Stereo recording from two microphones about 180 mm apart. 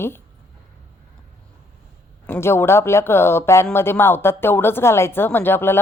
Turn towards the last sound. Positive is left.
turn(degrees=10)  # may be behind; listen again after turning